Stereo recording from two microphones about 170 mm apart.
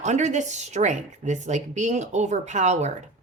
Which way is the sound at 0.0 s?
45° right (ahead or behind).